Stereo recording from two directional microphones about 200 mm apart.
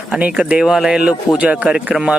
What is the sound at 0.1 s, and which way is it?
Speech, 5° right (ahead or behind).